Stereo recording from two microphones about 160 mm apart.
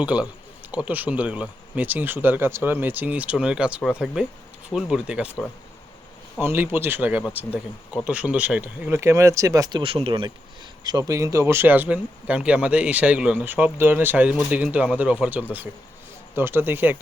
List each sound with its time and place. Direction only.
0.0 s speech: 5° right (ahead or behind)
6.4 s speech: 15° right (ahead or behind)